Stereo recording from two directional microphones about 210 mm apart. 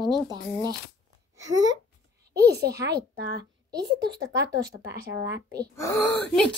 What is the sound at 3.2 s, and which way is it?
Speech, 50° right (ahead or behind).